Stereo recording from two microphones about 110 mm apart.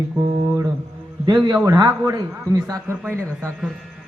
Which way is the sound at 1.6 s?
30° right (ahead or behind).